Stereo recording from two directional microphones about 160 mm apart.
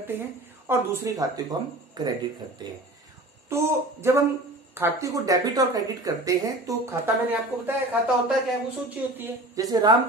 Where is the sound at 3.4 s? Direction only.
15° right (ahead or behind).